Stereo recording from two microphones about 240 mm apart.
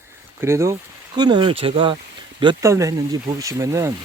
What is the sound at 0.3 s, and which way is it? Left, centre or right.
Speech, centre.